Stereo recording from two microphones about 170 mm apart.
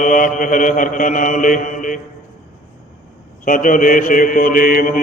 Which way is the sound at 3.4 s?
55° left (ahead or behind).